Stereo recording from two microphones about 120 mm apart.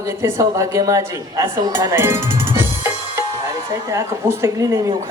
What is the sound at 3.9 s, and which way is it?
Speech, 20° right (ahead or behind).